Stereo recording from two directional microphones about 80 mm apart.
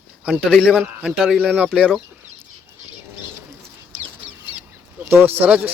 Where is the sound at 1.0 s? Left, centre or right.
Centre.